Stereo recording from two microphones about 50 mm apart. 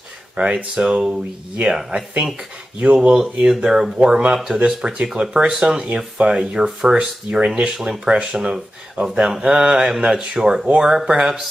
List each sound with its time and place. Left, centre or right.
0.4 s speech: right